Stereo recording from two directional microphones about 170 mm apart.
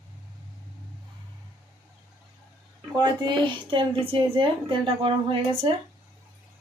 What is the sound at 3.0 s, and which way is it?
A woman's voice, 25° right (ahead or behind).